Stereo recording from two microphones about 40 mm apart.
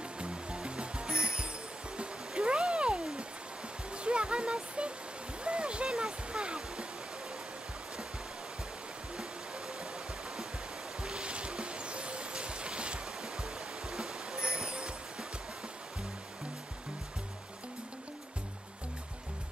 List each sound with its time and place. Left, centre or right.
0.2 s music: right
2.0 s a sound: right
3.9 s music: right
11.0 s music: right